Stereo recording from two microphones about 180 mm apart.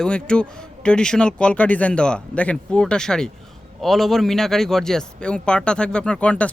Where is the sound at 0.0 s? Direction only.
5° left (ahead or behind).